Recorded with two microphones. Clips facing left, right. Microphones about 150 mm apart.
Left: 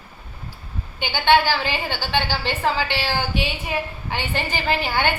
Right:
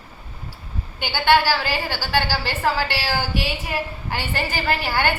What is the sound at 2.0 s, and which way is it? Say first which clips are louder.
A woman's voice: right 1 dB; 5° right (ahead or behind).